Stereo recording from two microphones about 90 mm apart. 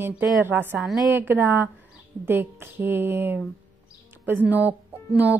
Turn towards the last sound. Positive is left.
turn(degrees=-15)  # may be behind; listen again after turning